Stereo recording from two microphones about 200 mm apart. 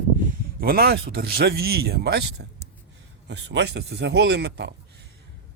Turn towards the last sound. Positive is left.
turn(degrees=-60)  # may be behind; listen again after turning